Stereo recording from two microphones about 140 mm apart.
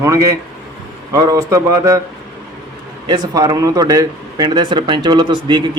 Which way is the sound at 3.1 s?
25° right (ahead or behind).